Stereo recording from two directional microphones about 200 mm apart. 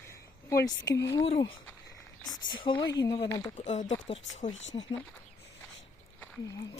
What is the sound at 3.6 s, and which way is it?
Speech, 35° left (ahead or behind).